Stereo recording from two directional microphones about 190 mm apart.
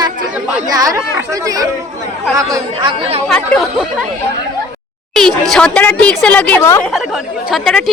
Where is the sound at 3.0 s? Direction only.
30° right (ahead or behind).